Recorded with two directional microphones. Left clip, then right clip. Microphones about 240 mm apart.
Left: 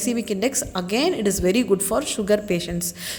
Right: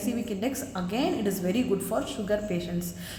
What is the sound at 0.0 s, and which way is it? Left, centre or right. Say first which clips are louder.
A woman's voice: left 7 dB; left.